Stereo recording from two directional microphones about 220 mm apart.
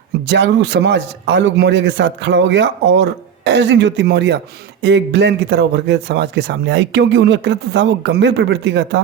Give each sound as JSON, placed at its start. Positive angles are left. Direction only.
{"t": 0.3, "sound": "speech", "side_deg": -55}